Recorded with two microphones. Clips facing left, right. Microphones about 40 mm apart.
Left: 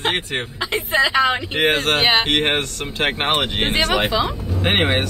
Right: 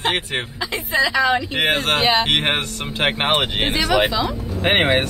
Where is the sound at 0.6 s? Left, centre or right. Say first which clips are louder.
Left 2 dB; left.